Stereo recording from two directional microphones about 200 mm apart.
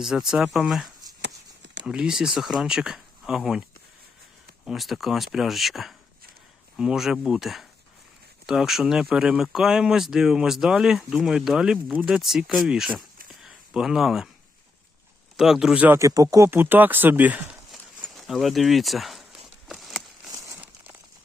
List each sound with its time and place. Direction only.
0.0 s speech: centre (ahead or behind)
1.2 s a sound: 60° right (ahead or behind)
1.9 s speech: 5° right (ahead or behind)
13.4 s a sound: 5° right (ahead or behind)
15.4 s speech: centre (ahead or behind)
20.3 s crumpling: 15° right (ahead or behind)